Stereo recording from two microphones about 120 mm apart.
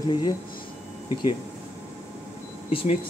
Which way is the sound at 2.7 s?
50° left (ahead or behind).